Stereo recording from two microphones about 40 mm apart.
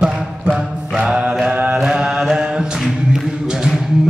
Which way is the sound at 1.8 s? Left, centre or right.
Centre.